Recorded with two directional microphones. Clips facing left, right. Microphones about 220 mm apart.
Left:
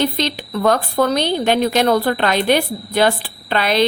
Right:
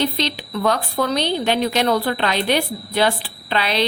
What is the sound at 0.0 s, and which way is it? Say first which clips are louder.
A woman's voice: left 2 dB; 50° left (ahead or behind).